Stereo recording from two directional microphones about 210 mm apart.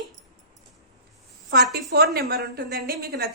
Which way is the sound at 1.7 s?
50° right (ahead or behind).